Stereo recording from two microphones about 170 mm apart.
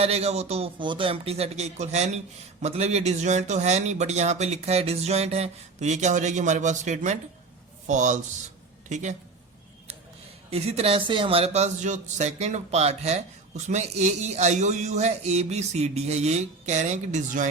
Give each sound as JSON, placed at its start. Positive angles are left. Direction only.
{"t": 0.0, "sound": "speech", "side_deg": -40}
{"t": 10.5, "sound": "speech", "side_deg": -40}